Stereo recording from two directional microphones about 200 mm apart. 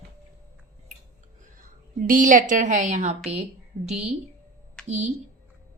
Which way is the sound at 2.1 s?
40° right (ahead or behind).